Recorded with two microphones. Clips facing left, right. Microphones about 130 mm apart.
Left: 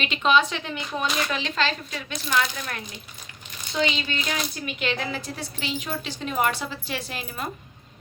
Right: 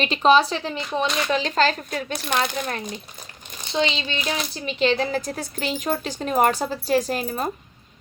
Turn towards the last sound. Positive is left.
turn(degrees=-40)  # may be behind; listen again after turning